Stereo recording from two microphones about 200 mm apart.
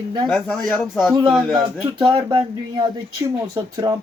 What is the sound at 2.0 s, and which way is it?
Speech, 25° right (ahead or behind).